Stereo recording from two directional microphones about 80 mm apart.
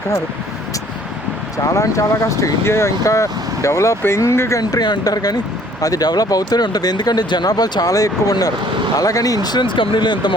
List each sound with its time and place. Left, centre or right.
1.6 s speech: left
4.8 s speech: left